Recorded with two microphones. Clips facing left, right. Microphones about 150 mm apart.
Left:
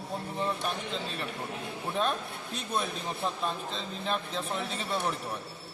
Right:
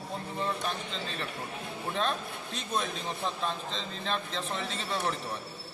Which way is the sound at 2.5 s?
5° left (ahead or behind).